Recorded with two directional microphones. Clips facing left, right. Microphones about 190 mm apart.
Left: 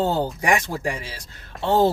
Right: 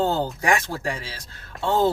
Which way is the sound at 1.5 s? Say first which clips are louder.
Even; centre (ahead or behind).